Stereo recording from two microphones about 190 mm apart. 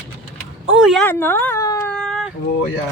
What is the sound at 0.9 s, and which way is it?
Speech, 5° left (ahead or behind).